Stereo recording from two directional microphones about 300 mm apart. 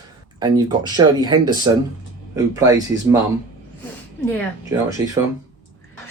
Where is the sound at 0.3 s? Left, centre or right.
Centre.